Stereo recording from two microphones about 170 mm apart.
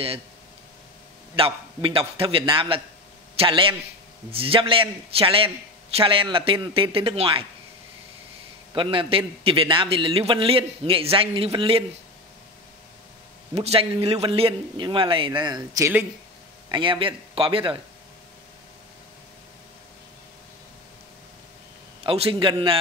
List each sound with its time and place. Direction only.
1.3 s a man's voice: 30° right (ahead or behind)
8.7 s a man's voice: 30° right (ahead or behind)
13.6 s a man's voice: 35° right (ahead or behind)
22.0 s a man's voice: 35° right (ahead or behind)